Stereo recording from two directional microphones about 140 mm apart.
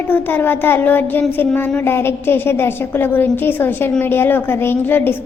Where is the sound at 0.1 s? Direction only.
15° left (ahead or behind).